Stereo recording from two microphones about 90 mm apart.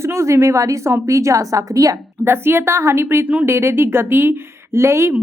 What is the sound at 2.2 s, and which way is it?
A woman's voice, 25° right (ahead or behind).